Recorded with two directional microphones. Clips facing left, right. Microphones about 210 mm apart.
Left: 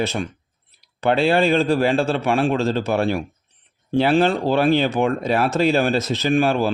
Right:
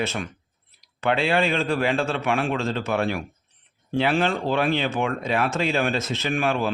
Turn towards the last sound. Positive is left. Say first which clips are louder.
# left 6 dB
turn(degrees=35)  # may be behind; listen again after turning